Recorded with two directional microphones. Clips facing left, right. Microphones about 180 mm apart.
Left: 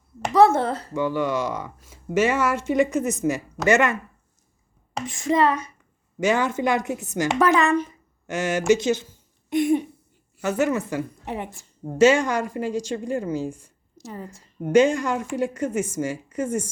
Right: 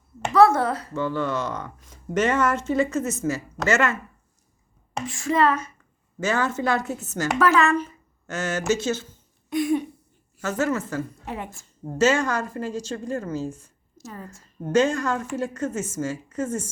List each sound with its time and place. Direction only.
0.3 s speech: 25° left (ahead or behind)
0.9 s a woman's voice: 15° left (ahead or behind)
5.0 s a woman's voice: 20° left (ahead or behind)